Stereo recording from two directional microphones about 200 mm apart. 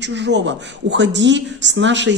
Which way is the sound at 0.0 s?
60° right (ahead or behind).